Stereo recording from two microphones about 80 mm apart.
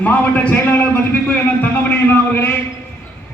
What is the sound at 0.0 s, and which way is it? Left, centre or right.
A man's voice, centre.